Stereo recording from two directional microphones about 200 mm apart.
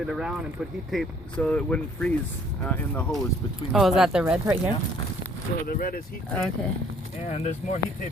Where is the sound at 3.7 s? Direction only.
Centre (ahead or behind).